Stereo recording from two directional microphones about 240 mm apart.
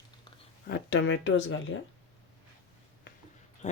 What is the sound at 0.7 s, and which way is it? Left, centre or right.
Speech, left.